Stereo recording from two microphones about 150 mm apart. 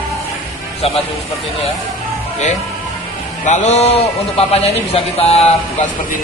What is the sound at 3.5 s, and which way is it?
A man's voice, 50° left (ahead or behind).